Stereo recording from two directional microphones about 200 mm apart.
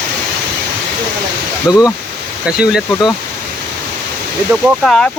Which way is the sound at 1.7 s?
15° left (ahead or behind).